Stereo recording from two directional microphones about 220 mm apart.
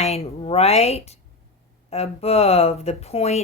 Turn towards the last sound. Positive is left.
turn(degrees=30)  # may be behind; listen again after turning